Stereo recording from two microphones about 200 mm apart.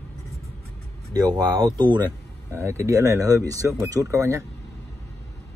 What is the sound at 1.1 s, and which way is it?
Speech, 20° right (ahead or behind).